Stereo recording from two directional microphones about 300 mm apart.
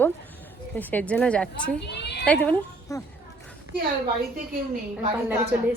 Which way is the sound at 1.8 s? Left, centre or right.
Left.